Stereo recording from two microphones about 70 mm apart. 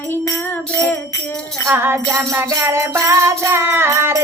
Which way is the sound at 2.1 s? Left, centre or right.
Right.